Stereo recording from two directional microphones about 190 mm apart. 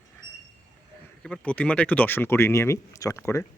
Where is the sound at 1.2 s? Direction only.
5° left (ahead or behind).